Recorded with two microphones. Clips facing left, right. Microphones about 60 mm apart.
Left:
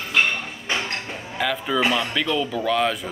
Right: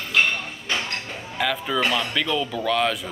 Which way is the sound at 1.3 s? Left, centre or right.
Centre.